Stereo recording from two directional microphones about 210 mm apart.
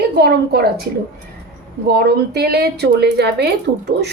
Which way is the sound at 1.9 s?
50° right (ahead or behind).